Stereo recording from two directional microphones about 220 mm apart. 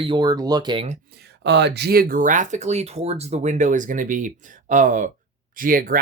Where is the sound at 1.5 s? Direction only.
50° right (ahead or behind).